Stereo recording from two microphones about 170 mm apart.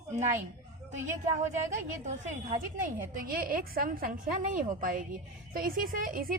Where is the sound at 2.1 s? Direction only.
45° right (ahead or behind).